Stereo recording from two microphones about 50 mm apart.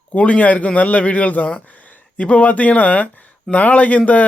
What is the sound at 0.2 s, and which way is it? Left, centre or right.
Speech, left.